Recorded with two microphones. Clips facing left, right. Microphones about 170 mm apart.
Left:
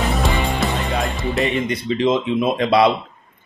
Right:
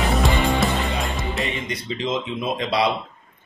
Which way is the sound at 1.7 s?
55° left (ahead or behind).